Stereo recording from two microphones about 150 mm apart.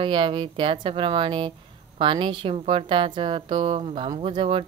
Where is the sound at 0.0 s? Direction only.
35° right (ahead or behind).